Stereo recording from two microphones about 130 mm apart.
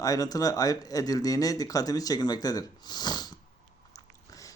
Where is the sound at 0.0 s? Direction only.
30° left (ahead or behind).